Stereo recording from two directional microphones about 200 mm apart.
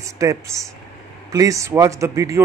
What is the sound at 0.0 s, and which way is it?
A man's voice, 15° right (ahead or behind).